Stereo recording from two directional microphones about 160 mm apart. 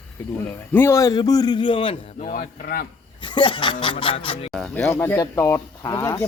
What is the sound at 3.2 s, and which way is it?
Speech, 30° left (ahead or behind).